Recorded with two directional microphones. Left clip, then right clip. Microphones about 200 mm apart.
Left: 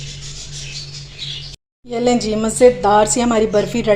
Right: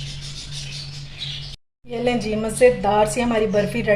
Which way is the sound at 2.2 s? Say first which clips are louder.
Left 3 dB; 30° left (ahead or behind).